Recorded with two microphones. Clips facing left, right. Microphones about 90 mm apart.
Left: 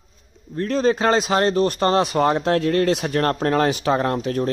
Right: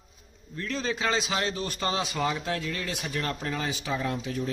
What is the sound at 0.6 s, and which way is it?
A man's voice, 45° left (ahead or behind).